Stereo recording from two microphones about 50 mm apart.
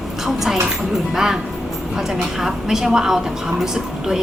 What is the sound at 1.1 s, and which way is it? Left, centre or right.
A woman's voice, centre.